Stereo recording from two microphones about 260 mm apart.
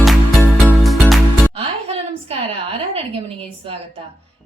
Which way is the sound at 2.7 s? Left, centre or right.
Right.